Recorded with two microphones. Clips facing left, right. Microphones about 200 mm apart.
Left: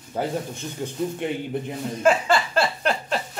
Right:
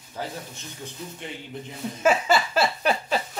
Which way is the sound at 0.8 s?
55° left (ahead or behind).